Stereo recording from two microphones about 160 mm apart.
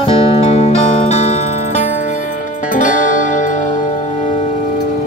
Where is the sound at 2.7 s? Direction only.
50° left (ahead or behind).